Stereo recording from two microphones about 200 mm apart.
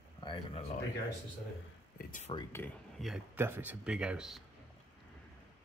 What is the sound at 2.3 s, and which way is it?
Speech, 10° left (ahead or behind).